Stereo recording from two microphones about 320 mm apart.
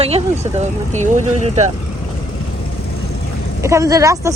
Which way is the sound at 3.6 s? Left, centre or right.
Centre.